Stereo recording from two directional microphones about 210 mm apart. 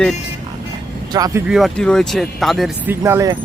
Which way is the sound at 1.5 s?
Centre (ahead or behind).